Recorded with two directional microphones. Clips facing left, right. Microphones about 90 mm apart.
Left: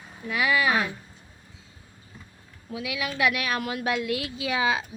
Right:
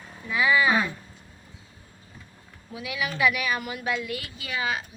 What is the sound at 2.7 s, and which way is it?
A woman's voice, 90° left.